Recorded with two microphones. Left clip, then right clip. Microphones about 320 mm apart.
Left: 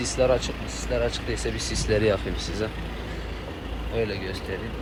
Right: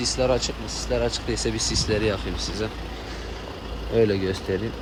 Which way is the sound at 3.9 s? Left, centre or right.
Right.